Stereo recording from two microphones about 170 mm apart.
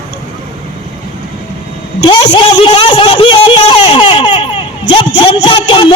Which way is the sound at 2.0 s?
25° left (ahead or behind).